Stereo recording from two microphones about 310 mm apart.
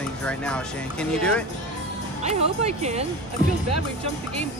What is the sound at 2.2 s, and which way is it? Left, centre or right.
Speech, right.